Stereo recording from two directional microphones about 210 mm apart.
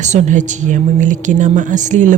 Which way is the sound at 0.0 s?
35° right (ahead or behind).